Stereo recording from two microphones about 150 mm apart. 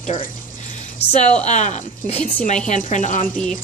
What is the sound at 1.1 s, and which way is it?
A woman's voice, 50° left (ahead or behind).